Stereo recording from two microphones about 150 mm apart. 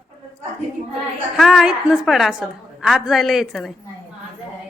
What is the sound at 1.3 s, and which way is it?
A woman's voice, centre (ahead or behind).